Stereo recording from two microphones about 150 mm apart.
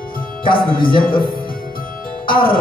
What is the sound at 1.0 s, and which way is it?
Speech, 75° left (ahead or behind).